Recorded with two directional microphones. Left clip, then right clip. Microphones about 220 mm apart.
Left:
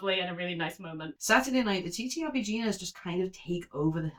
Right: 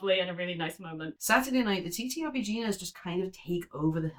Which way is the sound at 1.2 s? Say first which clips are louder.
Left 1 dB; 15° right (ahead or behind).